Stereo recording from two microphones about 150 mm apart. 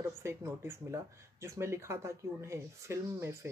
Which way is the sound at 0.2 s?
20° right (ahead or behind).